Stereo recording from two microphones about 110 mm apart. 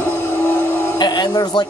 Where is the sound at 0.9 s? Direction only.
40° left (ahead or behind).